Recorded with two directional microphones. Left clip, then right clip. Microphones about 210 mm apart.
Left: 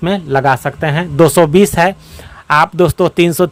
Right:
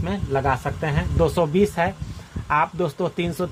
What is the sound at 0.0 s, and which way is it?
Speech, 55° left (ahead or behind).